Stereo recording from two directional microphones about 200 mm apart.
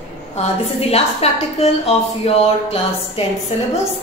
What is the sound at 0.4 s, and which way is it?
A woman's voice, 30° left (ahead or behind).